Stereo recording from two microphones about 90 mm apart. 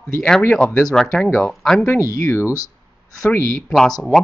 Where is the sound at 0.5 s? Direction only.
15° left (ahead or behind).